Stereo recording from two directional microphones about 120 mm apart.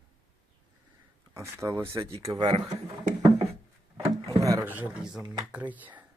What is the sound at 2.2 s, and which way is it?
Speech, 35° right (ahead or behind).